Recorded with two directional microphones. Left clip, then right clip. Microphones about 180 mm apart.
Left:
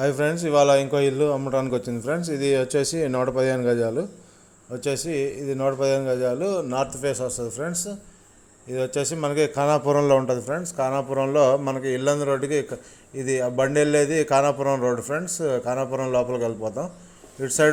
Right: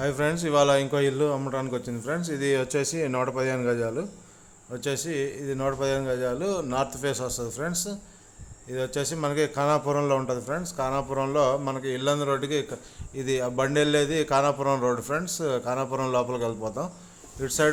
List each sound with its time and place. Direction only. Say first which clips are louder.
0.0 s a man's voice: left 4 dB; 10° left (ahead or behind)